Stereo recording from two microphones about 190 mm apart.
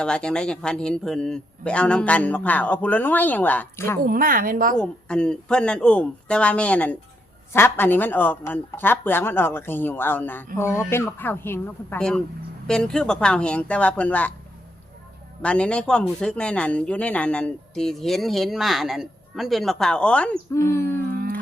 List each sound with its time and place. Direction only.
0.0 s speech: 5° left (ahead or behind)
4.0 s speech: 50° right (ahead or behind)
4.8 s a man's voice: 5° left (ahead or behind)
15.4 s a man's voice: 5° left (ahead or behind)
21.1 s a sound: 50° right (ahead or behind)